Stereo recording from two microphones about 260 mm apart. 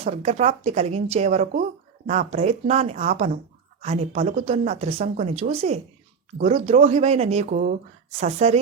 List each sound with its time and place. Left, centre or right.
0.0 s speech: right